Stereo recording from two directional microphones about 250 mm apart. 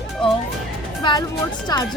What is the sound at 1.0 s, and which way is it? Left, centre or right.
Speech, centre.